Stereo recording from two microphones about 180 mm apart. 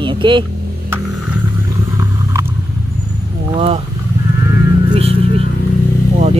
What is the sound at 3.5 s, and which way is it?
Speech, 35° right (ahead or behind).